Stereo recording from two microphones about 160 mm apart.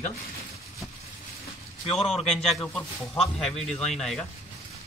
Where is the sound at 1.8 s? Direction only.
40° left (ahead or behind).